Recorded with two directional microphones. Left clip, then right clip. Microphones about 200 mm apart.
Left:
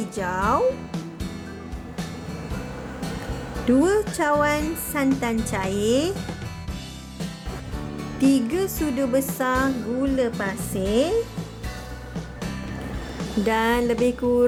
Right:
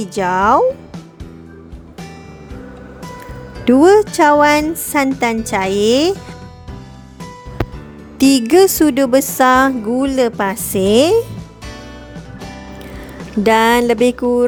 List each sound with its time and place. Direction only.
0.0 s a woman's voice: 45° right (ahead or behind)
3.7 s a woman's voice: 45° right (ahead or behind)
8.2 s a woman's voice: 50° right (ahead or behind)
13.4 s a woman's voice: 50° right (ahead or behind)